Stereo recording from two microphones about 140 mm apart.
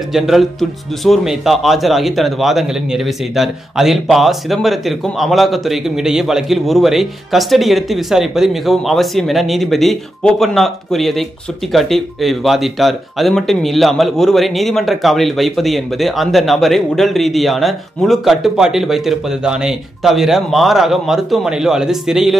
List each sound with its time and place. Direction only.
0.1 s a man's voice: centre (ahead or behind)